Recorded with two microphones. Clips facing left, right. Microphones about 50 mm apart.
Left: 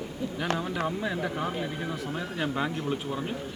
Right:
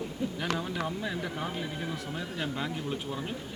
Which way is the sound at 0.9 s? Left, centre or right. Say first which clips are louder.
Left 4 dB; centre.